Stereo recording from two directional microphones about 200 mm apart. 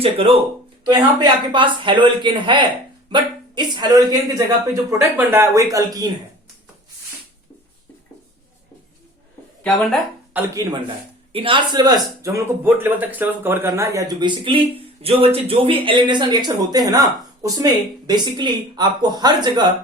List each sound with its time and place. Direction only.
0.9 s a man's voice: 20° right (ahead or behind)
10.3 s a man's voice: 10° right (ahead or behind)